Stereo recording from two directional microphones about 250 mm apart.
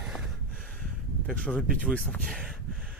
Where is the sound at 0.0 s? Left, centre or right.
Centre.